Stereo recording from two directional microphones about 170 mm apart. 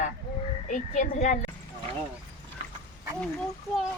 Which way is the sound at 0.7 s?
45° left (ahead or behind).